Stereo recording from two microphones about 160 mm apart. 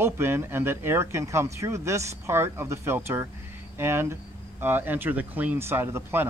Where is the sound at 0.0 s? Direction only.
15° right (ahead or behind).